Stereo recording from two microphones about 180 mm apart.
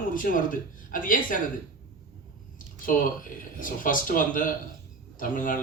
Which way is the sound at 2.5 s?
50° left (ahead or behind).